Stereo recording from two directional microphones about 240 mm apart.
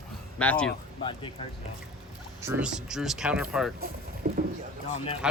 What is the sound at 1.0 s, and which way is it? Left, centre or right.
Speech, left.